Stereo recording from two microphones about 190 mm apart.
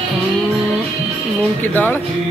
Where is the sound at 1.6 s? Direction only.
10° left (ahead or behind).